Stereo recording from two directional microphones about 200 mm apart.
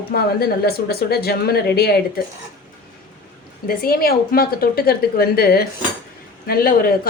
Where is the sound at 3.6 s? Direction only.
50° left (ahead or behind).